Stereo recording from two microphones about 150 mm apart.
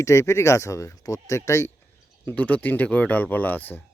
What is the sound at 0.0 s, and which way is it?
Speech, 20° left (ahead or behind).